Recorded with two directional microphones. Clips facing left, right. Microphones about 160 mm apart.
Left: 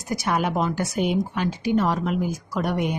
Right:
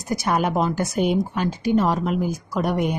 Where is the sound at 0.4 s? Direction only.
40° right (ahead or behind).